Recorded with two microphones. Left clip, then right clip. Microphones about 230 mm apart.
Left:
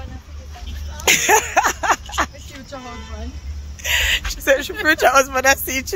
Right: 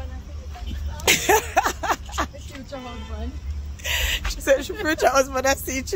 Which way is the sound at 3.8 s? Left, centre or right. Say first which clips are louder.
Left 6 dB; centre.